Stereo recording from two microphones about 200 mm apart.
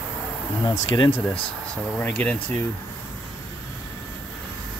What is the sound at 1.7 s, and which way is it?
Speech, 5° left (ahead or behind).